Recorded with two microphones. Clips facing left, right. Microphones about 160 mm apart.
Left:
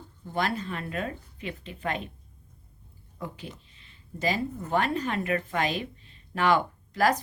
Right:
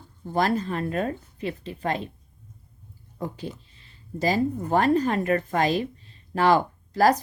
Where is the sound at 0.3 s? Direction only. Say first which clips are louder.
Right 6 dB; 40° right (ahead or behind).